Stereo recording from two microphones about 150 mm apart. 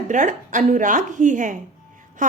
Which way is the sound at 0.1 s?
55° right (ahead or behind).